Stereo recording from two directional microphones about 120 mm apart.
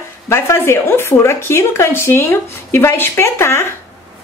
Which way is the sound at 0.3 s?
20° left (ahead or behind).